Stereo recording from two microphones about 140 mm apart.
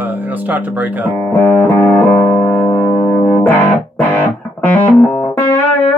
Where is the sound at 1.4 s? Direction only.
15° left (ahead or behind).